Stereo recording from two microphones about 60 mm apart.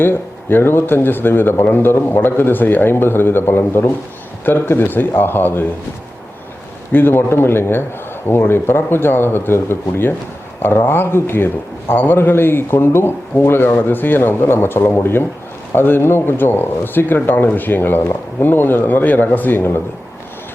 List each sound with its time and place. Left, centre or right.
0.0 s a man's voice: left
6.9 s a man's voice: left